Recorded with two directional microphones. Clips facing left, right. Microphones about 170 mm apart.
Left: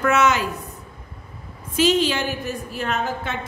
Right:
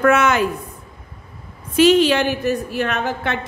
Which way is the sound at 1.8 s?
65° right (ahead or behind).